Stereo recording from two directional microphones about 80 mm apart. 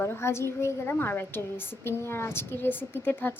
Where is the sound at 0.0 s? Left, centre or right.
Left.